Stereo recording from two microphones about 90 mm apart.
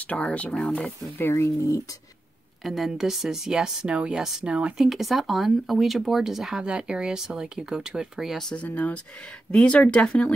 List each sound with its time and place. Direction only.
0.1 s speech: 15° left (ahead or behind)
1.2 s speech: 35° left (ahead or behind)
2.6 s speech: centre (ahead or behind)
8.6 s speech: 15° left (ahead or behind)